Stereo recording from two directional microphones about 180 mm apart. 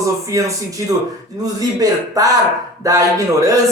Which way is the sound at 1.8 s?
20° right (ahead or behind).